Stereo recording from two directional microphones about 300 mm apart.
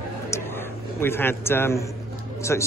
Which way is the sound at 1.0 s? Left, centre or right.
Centre.